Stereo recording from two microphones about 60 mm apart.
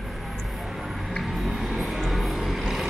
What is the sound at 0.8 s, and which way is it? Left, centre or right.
Music, centre.